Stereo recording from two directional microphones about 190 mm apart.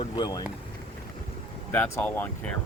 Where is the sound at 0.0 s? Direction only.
20° left (ahead or behind).